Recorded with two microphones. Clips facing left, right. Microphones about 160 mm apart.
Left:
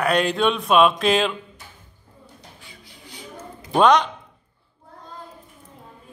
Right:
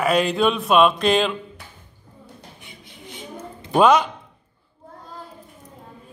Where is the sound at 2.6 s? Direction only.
20° right (ahead or behind).